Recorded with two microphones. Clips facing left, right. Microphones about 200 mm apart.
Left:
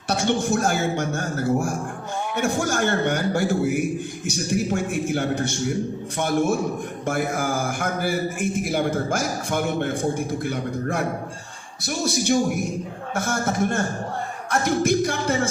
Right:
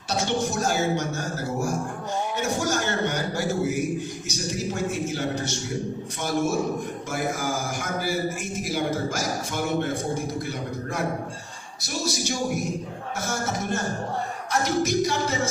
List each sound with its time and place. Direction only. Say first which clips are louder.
0.1 s a man's voice: left 4 dB; 55° left (ahead or behind)